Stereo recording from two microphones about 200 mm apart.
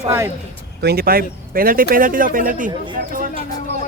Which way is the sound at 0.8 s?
50° right (ahead or behind).